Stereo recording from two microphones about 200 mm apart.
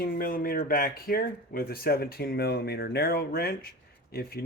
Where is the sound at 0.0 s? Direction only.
45° left (ahead or behind).